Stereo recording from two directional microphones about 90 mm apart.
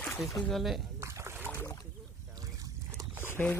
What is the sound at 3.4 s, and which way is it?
Speech, 20° left (ahead or behind).